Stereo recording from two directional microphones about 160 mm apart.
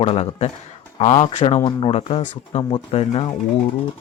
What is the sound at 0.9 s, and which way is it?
Speech, 50° left (ahead or behind).